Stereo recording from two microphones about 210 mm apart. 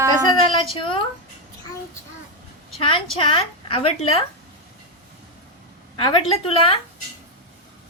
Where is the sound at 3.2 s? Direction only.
25° left (ahead or behind).